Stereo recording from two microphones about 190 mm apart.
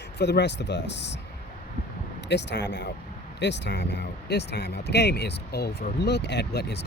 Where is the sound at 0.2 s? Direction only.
60° left (ahead or behind).